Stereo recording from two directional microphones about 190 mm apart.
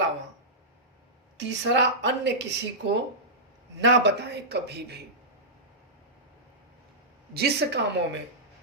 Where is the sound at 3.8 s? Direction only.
70° right (ahead or behind).